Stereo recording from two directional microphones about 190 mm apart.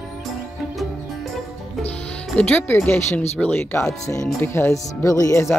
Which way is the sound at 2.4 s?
10° left (ahead or behind).